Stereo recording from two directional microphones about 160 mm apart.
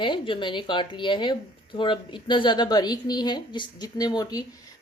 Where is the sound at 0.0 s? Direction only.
30° left (ahead or behind).